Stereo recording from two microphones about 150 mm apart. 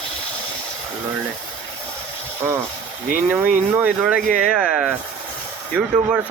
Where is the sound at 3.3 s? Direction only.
10° right (ahead or behind).